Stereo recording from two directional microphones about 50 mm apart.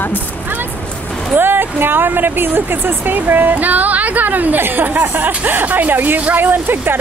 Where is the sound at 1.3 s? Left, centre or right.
Right.